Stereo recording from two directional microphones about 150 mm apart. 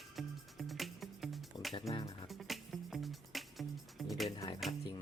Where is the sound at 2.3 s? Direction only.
Centre (ahead or behind).